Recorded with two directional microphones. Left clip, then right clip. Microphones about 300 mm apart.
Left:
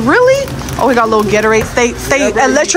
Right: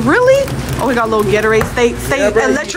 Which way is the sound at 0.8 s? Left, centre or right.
Centre.